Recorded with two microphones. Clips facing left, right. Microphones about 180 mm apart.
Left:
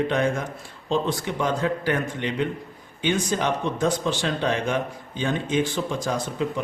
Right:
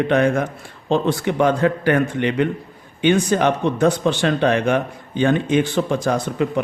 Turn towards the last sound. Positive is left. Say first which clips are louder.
# right 6 dB
turn(degrees=-65)  # may be behind; listen again after turning